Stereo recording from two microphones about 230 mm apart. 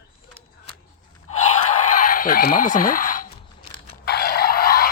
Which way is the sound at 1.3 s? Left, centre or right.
Left.